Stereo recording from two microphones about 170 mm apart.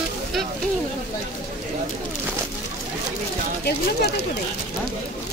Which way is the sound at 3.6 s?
70° left (ahead or behind).